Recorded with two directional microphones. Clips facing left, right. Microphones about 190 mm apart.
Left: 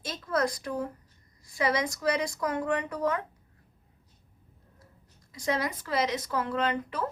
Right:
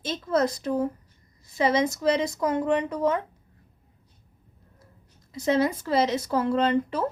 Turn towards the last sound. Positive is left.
turn(degrees=-30)  # may be behind; listen again after turning